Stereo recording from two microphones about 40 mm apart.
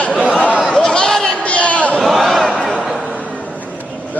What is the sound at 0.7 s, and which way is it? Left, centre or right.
Chatter, centre.